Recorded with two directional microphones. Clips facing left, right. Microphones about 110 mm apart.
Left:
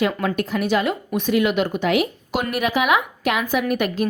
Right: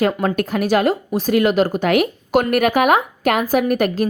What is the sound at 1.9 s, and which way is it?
A woman's voice, 50° right (ahead or behind).